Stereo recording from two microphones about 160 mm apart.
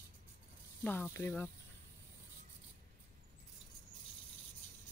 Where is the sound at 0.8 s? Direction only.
15° left (ahead or behind).